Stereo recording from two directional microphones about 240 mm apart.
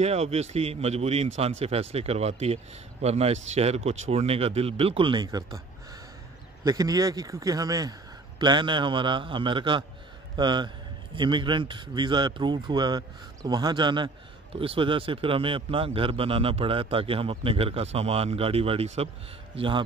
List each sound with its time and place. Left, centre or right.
0.0 s speech: right
6.6 s a man's voice: centre